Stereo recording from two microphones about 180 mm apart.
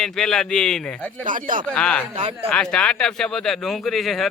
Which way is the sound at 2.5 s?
5° left (ahead or behind).